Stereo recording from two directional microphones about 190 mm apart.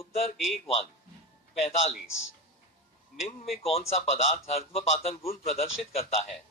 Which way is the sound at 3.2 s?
35° left (ahead or behind).